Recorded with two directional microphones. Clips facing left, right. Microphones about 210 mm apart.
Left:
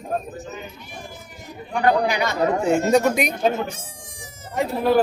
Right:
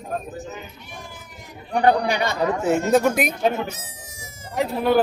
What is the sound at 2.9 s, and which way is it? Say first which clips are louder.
Speech: even; centre (ahead or behind).